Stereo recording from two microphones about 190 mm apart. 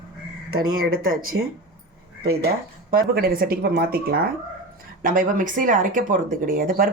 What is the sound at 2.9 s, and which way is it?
Speech, 50° right (ahead or behind).